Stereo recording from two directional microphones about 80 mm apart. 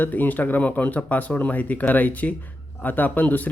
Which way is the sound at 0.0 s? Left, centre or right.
Left.